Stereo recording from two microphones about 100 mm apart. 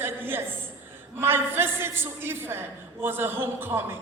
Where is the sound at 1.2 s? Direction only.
20° right (ahead or behind).